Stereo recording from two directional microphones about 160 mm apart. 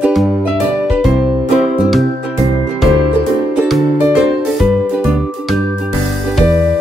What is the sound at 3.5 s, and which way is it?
Music, 5° right (ahead or behind).